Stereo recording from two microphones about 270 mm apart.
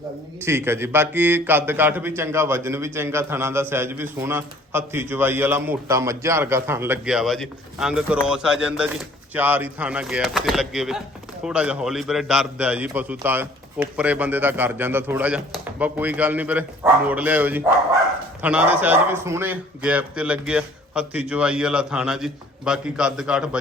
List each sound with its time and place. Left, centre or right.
0.4 s a man's voice: centre